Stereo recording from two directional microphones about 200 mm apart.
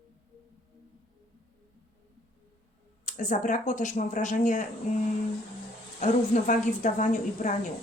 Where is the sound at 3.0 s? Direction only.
40° left (ahead or behind).